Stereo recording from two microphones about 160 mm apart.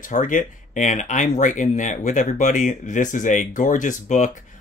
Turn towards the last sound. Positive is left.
turn(degrees=50)  # may be behind; listen again after turning